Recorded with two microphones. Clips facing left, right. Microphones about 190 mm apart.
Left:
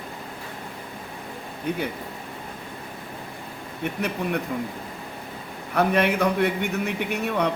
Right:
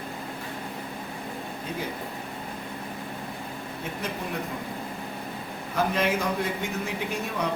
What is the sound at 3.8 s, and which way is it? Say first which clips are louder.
Speech: left 7 dB; 65° left (ahead or behind).